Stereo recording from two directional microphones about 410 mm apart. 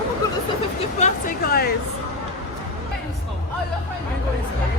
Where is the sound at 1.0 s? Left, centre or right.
Centre.